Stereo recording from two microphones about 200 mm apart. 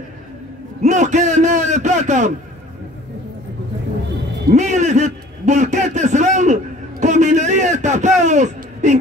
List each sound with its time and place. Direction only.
0.8 s a man's voice: 35° right (ahead or behind)
4.5 s a sound: 35° right (ahead or behind)
8.2 s speech: 35° right (ahead or behind)